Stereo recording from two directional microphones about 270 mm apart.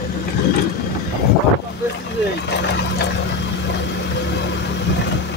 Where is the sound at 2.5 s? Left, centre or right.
Left.